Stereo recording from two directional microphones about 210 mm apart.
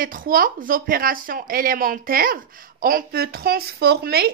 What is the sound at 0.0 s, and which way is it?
Speech, 40° right (ahead or behind).